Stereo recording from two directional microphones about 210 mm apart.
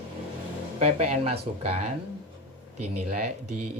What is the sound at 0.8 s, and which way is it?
Speech, 30° right (ahead or behind).